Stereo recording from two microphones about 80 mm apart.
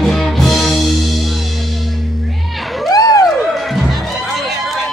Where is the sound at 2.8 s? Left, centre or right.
Left.